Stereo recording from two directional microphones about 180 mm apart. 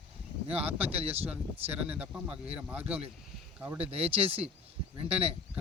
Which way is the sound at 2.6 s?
5° right (ahead or behind).